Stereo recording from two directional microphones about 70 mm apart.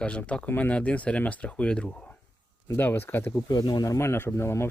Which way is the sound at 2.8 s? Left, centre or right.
Left.